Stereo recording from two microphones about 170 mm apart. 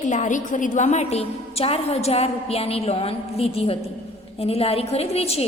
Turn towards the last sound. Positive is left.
turn(degrees=35)  # may be behind; listen again after turning